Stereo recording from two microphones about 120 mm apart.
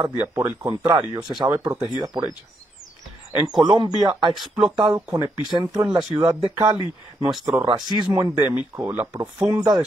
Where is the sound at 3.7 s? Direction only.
40° right (ahead or behind).